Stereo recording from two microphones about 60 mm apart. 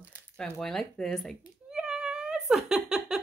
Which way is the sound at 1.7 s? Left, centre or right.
Centre.